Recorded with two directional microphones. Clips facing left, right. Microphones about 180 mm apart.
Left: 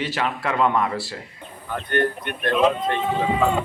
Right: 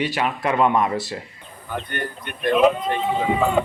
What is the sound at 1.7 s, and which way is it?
Speech, centre (ahead or behind).